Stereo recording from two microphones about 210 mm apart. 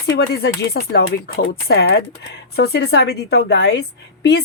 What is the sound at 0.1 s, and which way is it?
A woman's voice, 50° left (ahead or behind).